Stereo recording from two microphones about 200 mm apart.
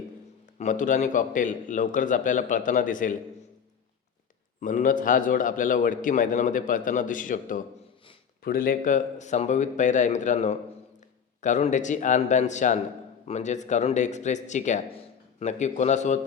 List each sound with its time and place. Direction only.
0.6 s a man's voice: 40° left (ahead or behind)
4.6 s a man's voice: 40° left (ahead or behind)